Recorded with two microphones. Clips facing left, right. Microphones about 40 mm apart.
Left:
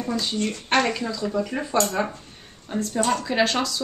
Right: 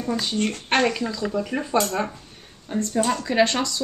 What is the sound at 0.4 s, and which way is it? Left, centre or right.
Speech, right.